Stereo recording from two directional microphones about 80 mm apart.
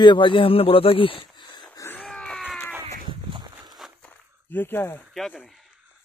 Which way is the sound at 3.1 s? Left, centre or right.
Right.